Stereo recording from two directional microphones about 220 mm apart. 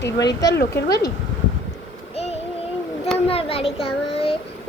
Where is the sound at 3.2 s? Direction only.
25° left (ahead or behind).